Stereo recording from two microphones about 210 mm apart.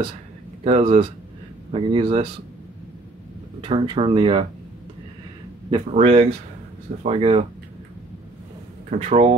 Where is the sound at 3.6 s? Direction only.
25° right (ahead or behind).